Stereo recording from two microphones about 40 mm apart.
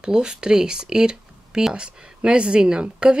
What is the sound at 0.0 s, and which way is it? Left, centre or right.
A woman's voice, right.